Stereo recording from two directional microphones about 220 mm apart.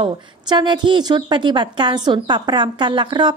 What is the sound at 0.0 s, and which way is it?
A woman's voice, 20° right (ahead or behind).